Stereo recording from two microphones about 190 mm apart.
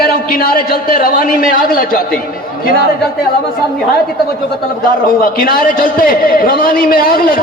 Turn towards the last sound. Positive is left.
turn(degrees=50)  # may be behind; listen again after turning